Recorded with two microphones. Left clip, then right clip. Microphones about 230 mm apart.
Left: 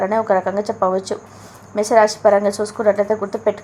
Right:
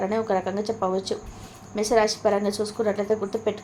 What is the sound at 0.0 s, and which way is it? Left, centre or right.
A woman's voice, centre.